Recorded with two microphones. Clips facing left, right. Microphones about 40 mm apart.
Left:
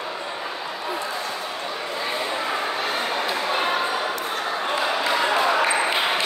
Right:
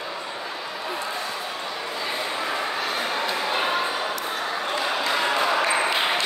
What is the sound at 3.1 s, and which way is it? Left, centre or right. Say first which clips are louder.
Bow-wow: left 1 dB; centre.